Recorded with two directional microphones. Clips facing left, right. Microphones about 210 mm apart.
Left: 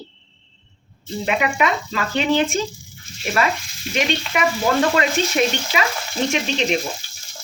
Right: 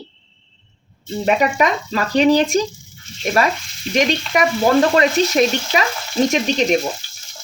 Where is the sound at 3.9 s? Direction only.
40° right (ahead or behind).